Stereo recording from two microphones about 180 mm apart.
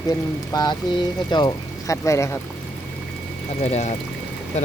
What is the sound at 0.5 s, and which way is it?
Speech, 25° left (ahead or behind).